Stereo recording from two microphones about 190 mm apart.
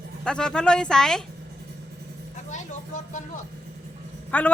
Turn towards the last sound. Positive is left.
turn(degrees=10)  # may be behind; listen again after turning